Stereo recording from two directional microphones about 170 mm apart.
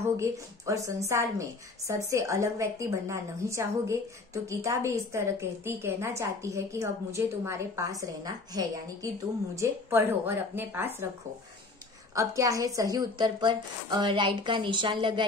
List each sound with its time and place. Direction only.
0.2 s a woman's voice: 20° right (ahead or behind)
12.2 s a woman's voice: 20° right (ahead or behind)